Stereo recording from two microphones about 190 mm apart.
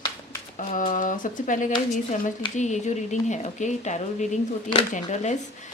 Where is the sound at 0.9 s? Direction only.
45° left (ahead or behind).